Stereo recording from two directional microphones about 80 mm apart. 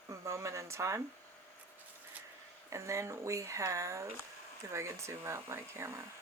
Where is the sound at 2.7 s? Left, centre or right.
Right.